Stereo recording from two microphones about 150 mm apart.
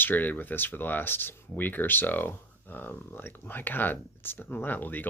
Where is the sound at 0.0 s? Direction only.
10° left (ahead or behind).